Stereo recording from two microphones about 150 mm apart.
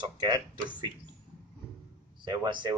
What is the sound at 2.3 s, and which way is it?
Speech, 30° right (ahead or behind).